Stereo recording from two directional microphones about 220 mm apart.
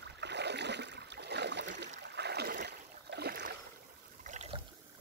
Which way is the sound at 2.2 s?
50° right (ahead or behind).